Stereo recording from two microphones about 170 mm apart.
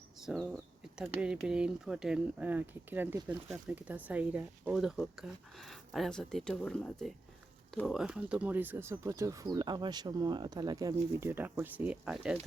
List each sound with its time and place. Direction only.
0.2 s speech: centre (ahead or behind)